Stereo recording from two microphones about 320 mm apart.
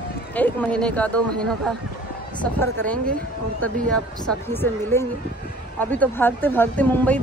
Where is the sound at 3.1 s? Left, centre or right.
Right.